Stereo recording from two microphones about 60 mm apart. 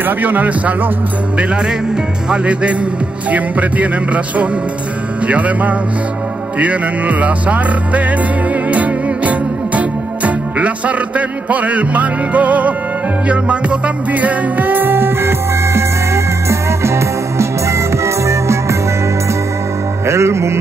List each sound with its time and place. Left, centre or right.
0.0 s music: right
20.1 s music: right